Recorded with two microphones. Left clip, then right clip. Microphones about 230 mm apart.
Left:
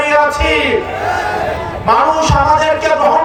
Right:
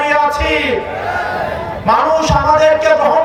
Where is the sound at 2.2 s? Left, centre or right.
Right.